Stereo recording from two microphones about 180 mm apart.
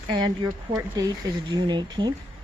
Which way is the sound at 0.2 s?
20° right (ahead or behind).